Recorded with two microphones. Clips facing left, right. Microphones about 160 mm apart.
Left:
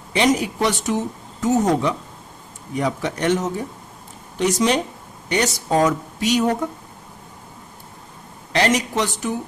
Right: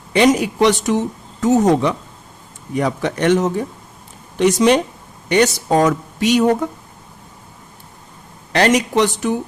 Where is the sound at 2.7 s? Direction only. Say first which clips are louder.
Right 4 dB; 65° right (ahead or behind).